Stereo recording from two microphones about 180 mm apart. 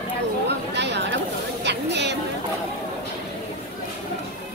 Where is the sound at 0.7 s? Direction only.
70° right (ahead or behind).